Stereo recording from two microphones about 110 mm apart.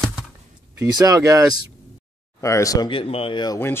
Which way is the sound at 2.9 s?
55° left (ahead or behind).